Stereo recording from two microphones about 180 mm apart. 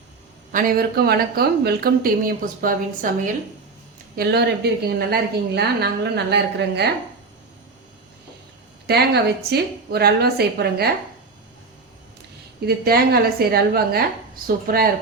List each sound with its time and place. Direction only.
0.5 s speech: 55° right (ahead or behind)
4.1 s a woman's voice: 60° right (ahead or behind)
8.9 s a woman's voice: 60° right (ahead or behind)
12.5 s a woman's voice: 60° right (ahead or behind)